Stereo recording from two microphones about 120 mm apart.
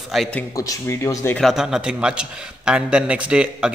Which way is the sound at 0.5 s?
30° left (ahead or behind).